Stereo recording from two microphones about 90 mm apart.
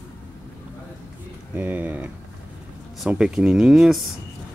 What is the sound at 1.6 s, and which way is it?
Speech, 20° right (ahead or behind).